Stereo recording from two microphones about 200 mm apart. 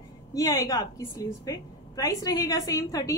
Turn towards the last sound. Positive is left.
turn(degrees=15)  # may be behind; listen again after turning